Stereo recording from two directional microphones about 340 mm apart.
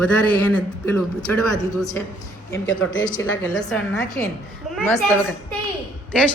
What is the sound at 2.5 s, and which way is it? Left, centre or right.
Speech, left.